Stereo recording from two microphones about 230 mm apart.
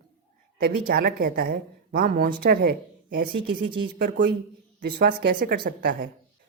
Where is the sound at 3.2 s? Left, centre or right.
Right.